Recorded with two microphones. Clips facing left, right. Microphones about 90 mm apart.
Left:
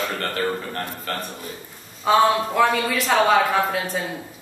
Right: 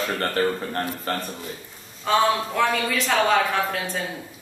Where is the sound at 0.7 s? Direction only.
30° right (ahead or behind).